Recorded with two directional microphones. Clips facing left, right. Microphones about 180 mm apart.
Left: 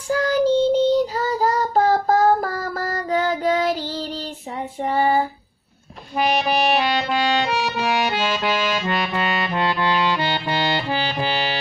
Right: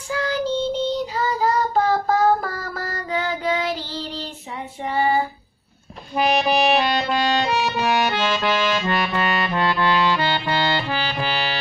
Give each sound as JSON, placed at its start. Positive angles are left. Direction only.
{"t": 0.1, "sound": "child singing", "side_deg": 45}
{"t": 4.8, "sound": "female singing", "side_deg": 45}
{"t": 6.1, "sound": "music", "side_deg": 5}